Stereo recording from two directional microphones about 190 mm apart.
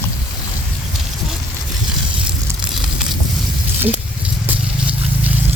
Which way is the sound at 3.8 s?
10° right (ahead or behind).